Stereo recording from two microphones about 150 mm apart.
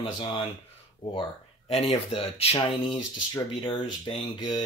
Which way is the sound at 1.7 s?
40° left (ahead or behind).